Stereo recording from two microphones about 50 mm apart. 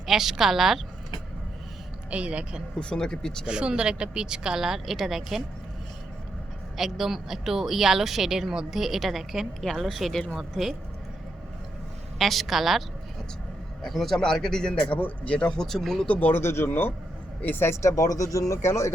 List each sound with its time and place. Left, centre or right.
0.0 s speech: centre
2.0 s speech: right
2.7 s a man's voice: centre
3.4 s speech: centre
6.7 s a woman's voice: centre
12.2 s a woman's voice: centre
13.8 s a man's voice: centre
14.8 s speech: left
15.6 s a man's voice: centre
16.0 s speech: left
16.3 s speech: left
16.6 s speech: left
17.8 s speech: left